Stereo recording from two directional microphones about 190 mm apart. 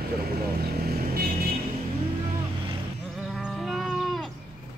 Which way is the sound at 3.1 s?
5° right (ahead or behind).